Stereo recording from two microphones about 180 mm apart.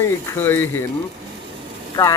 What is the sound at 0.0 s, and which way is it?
Speech, 15° left (ahead or behind).